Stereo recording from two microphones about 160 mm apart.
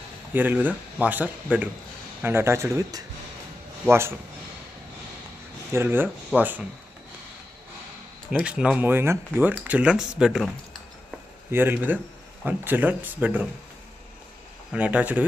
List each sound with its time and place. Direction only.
0.3 s speech: 10° right (ahead or behind)
5.7 s speech: 15° right (ahead or behind)
8.3 s speech: 5° right (ahead or behind)
11.5 s speech: 15° right (ahead or behind)
14.7 s speech: 10° right (ahead or behind)